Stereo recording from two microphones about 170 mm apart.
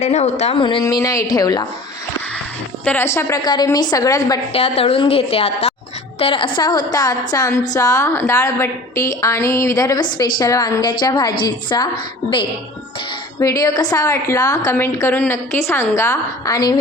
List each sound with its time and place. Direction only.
0.0 s a woman's voice: 40° left (ahead or behind)
0.6 s a woman's voice: 25° left (ahead or behind)
2.8 s a woman's voice: 15° left (ahead or behind)
4.5 s a woman's voice: 35° left (ahead or behind)
13.4 s a woman's voice: 20° left (ahead or behind)